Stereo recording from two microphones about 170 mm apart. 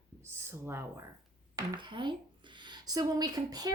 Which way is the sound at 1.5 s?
25° right (ahead or behind).